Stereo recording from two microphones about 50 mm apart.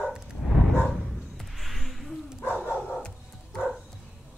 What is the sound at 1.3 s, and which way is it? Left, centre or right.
Music, centre.